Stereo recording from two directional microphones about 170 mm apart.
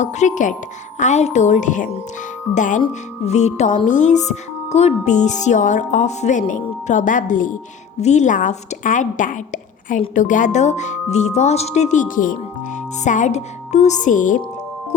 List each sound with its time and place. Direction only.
0.0 s speech: 45° left (ahead or behind)
2.8 s music: 40° left (ahead or behind)
3.8 s speech: 45° left (ahead or behind)